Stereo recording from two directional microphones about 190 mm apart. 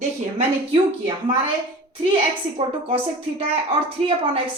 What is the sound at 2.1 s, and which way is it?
A woman's voice, 30° right (ahead or behind).